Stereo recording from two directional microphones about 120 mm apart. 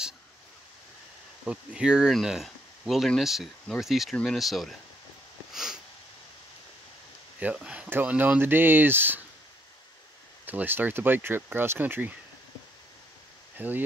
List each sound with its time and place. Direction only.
1.4 s speech: 10° right (ahead or behind)
5.5 s sniff: 5° right (ahead or behind)
7.3 s speech: 10° right (ahead or behind)
10.4 s speech: 15° right (ahead or behind)
13.6 s speech: 15° right (ahead or behind)